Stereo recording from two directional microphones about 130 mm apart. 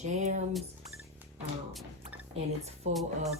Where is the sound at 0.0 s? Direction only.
65° right (ahead or behind).